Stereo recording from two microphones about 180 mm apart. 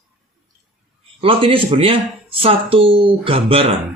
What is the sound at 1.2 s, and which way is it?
Speech, 30° right (ahead or behind).